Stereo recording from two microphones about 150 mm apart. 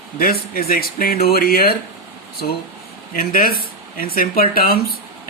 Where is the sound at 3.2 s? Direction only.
75° left (ahead or behind).